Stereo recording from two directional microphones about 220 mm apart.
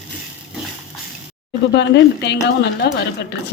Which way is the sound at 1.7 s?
50° left (ahead or behind).